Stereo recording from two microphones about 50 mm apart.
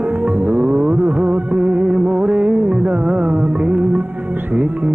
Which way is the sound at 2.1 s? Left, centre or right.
Right.